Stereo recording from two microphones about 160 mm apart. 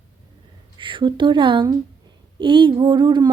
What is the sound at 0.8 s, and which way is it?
Speech, 30° right (ahead or behind).